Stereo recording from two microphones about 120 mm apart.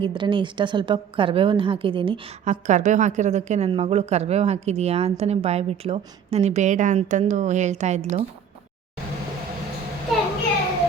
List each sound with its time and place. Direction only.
0.0 s a woman's voice: 45° right (ahead or behind)
2.4 s a woman's voice: 75° right (ahead or behind)
3.7 s a woman's voice: 55° right (ahead or behind); by 8.2 s 70° right (ahead or behind)